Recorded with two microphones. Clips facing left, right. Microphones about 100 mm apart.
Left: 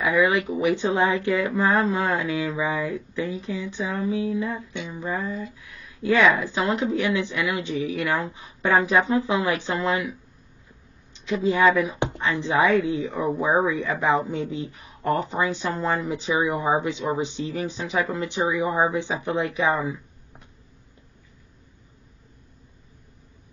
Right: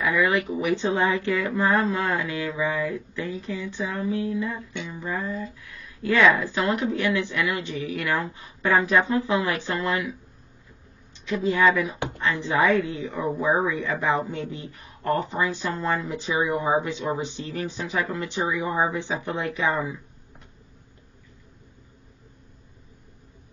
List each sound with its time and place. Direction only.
0.0 s speech: 20° left (ahead or behind)
11.1 s speech: 20° left (ahead or behind)